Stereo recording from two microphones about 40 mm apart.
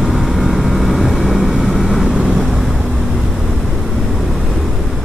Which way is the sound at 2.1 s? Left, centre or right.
Centre.